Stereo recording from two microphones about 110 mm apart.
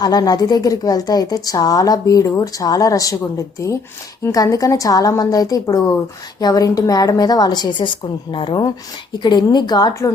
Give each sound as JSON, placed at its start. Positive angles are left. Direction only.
{"t": 0.0, "sound": "a woman's voice", "side_deg": 35}